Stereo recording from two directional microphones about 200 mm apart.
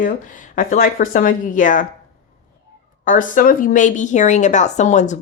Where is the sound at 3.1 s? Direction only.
40° left (ahead or behind).